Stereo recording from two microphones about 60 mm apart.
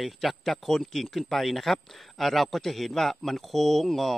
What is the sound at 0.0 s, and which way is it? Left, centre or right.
A man's voice, centre.